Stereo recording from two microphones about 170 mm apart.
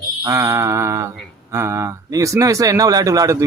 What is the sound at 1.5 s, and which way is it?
Speech, 15° right (ahead or behind).